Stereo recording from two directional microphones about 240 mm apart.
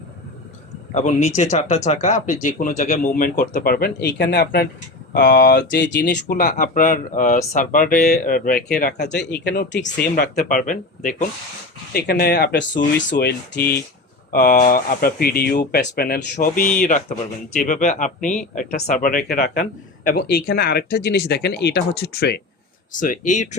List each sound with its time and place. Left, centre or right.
0.9 s speech: left